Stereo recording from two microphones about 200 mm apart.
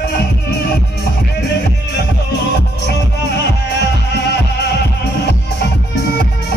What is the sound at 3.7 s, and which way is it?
Music, 60° left (ahead or behind).